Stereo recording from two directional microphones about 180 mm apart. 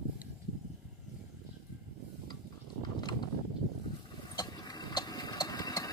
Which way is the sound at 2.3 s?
25° left (ahead or behind).